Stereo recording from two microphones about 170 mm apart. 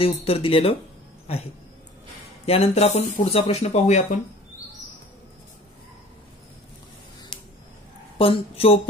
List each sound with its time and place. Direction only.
0.1 s speech: 35° left (ahead or behind)
8.2 s speech: 35° left (ahead or behind)